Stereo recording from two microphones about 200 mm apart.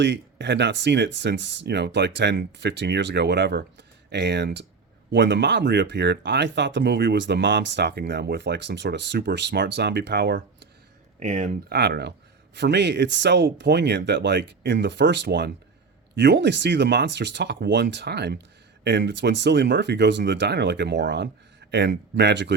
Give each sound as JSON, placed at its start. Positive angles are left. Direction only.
{"t": 0.0, "sound": "speech", "side_deg": -60}
{"t": 11.2, "sound": "speech", "side_deg": -35}
{"t": 11.7, "sound": "speech", "side_deg": -55}